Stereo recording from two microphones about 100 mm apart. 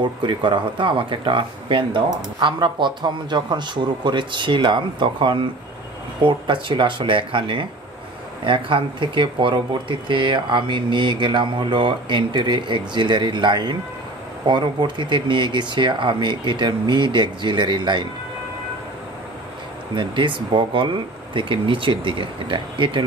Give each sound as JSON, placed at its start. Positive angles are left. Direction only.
{"t": 0.0, "sound": "speech", "side_deg": -55}
{"t": 20.0, "sound": "speech", "side_deg": -55}